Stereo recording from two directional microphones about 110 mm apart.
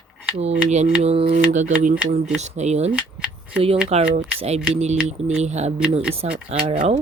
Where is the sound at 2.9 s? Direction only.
10° right (ahead or behind).